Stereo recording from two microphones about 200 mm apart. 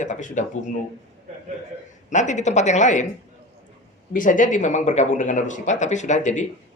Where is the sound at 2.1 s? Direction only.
35° left (ahead or behind).